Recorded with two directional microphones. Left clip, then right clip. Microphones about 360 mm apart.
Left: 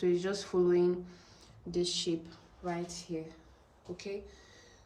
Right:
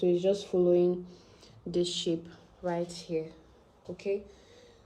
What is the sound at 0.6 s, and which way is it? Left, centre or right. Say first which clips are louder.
Speech: right 3 dB; centre.